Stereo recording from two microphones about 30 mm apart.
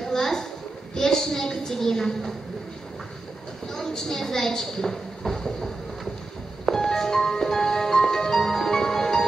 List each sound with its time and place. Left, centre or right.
0.0 s a sound: centre
3.6 s a woman's voice: centre
6.6 s music: centre